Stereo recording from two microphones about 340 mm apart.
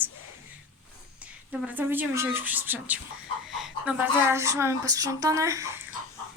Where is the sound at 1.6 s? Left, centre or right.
Centre.